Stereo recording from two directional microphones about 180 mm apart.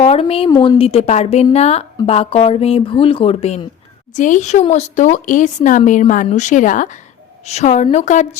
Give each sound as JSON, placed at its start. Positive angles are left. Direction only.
{"t": 0.0, "sound": "a woman's voice", "side_deg": 35}
{"t": 0.5, "sound": "a woman's voice", "side_deg": 20}
{"t": 0.8, "sound": "speech", "side_deg": 35}